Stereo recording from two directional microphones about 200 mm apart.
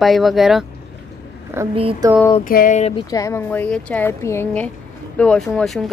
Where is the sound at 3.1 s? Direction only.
15° left (ahead or behind).